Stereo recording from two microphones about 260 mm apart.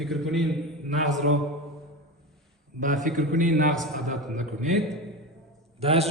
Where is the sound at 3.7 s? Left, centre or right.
Centre.